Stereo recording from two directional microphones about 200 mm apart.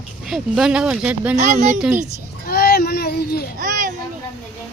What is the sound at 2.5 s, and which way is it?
Child singing, 50° left (ahead or behind).